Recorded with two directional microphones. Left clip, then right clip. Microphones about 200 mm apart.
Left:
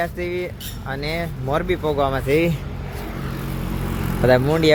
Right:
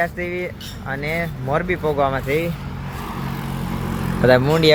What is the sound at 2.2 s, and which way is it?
Speech, 45° left (ahead or behind).